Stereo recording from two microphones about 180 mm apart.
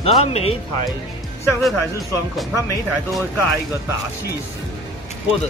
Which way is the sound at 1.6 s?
Centre (ahead or behind).